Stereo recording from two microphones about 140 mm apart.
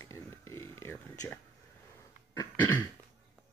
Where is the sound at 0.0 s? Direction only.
20° left (ahead or behind).